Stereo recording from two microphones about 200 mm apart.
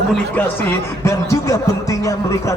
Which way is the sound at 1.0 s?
15° left (ahead or behind).